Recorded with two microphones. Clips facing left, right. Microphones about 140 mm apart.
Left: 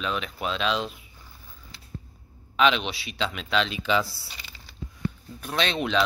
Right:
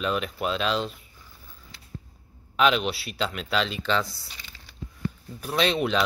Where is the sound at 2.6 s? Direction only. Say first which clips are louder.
Even; 5° right (ahead or behind).